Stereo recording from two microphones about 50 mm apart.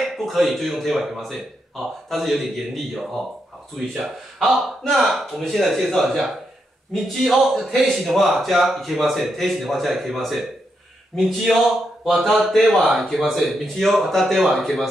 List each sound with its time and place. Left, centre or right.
0.0 s a man's voice: centre